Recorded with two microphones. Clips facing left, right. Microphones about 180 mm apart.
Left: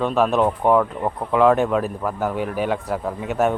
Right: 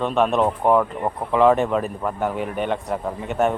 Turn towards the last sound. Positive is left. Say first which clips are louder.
# left 1 dB
turn(degrees=0)  # may be behind; listen again after turning